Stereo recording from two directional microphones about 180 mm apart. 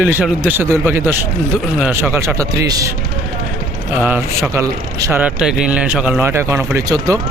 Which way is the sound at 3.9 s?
10° right (ahead or behind).